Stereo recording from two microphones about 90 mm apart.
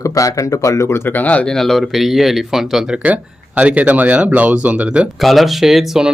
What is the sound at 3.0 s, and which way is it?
Speech, 15° right (ahead or behind).